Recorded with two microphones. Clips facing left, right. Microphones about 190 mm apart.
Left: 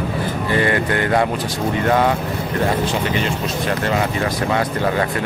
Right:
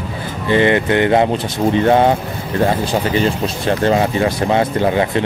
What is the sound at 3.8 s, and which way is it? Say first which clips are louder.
Speech: right 8 dB; 30° right (ahead or behind).